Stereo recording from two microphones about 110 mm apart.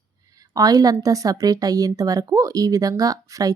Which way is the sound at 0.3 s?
35° right (ahead or behind).